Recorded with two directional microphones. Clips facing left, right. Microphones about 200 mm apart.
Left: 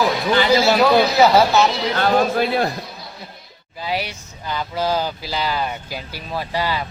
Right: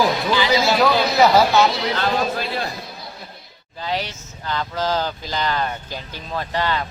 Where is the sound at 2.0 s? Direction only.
55° left (ahead or behind).